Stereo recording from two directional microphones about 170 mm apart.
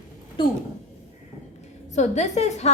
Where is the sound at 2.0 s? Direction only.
40° left (ahead or behind).